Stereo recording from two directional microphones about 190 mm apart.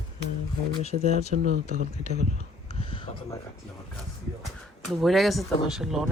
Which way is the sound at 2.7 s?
30° left (ahead or behind).